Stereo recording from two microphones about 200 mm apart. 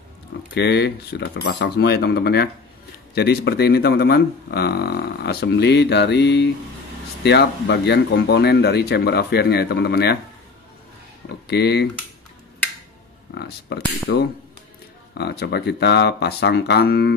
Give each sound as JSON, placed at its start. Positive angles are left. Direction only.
{"t": 0.6, "sound": "speech", "side_deg": 55}
{"t": 11.4, "sound": "speech", "side_deg": 55}
{"t": 13.3, "sound": "speech", "side_deg": 55}